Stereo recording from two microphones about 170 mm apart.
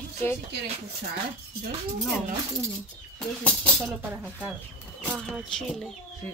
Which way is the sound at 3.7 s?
10° right (ahead or behind).